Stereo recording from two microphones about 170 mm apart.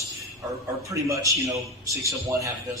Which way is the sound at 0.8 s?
20° right (ahead or behind).